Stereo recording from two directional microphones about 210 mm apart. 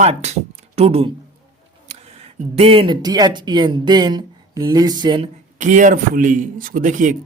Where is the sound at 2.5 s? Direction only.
25° right (ahead or behind).